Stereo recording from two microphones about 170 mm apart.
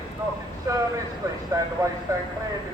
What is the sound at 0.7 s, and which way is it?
Speech, 20° right (ahead or behind).